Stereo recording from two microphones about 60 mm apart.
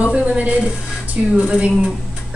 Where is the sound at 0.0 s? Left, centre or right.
Centre.